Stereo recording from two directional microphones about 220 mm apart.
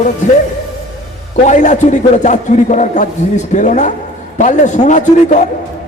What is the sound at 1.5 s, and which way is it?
A man's voice, 35° left (ahead or behind).